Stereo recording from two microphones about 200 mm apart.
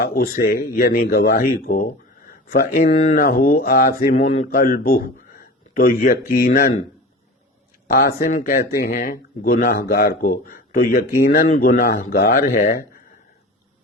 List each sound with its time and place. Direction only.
0.0 s speech: 50° left (ahead or behind)
3.2 s speech: 45° left (ahead or behind)
4.6 s a man's voice: 50° left (ahead or behind)
8.2 s speech: 40° left (ahead or behind)